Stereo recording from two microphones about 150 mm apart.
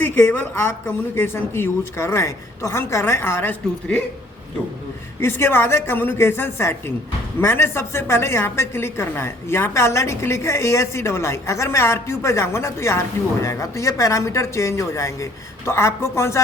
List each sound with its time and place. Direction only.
0.0 s speech: 15° left (ahead or behind)
5.2 s a woman's voice: 15° left (ahead or behind)